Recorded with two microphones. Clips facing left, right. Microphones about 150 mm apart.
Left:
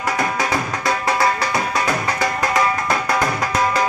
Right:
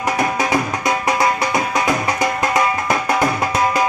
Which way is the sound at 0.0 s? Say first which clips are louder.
Right 2 dB; 20° right (ahead or behind).